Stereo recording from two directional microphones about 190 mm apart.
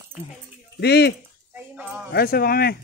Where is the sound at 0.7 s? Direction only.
60° left (ahead or behind).